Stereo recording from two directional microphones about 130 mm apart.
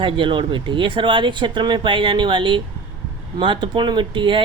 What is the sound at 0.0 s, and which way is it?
Speech, 40° right (ahead or behind).